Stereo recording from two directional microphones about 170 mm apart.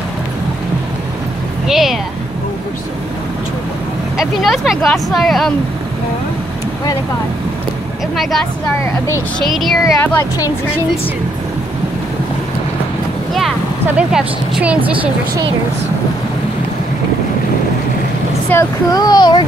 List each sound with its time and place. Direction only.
1.7 s speech: centre (ahead or behind)
4.2 s speech: centre (ahead or behind)
8.2 s speech: centre (ahead or behind)
9.5 s speech: centre (ahead or behind)
9.9 s a child's voice: 20° left (ahead or behind)
13.9 s a woman's voice: 5° right (ahead or behind)
18.5 s a child's voice: 20° left (ahead or behind)